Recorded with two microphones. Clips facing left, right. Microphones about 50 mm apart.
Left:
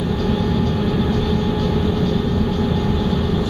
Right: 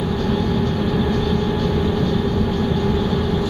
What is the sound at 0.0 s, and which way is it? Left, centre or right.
Vehicle, centre.